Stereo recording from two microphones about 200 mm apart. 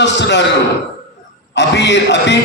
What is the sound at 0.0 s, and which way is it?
Speech, 60° left (ahead or behind).